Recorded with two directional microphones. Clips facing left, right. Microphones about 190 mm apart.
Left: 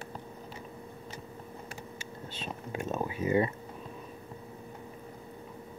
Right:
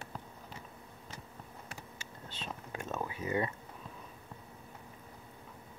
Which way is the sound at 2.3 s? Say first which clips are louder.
Left 5 dB; 15° left (ahead or behind).